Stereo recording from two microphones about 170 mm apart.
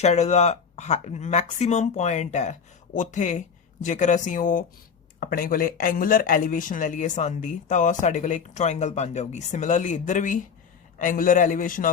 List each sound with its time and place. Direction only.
0.0 s speech: 40° left (ahead or behind)
5.2 s speech: 60° left (ahead or behind)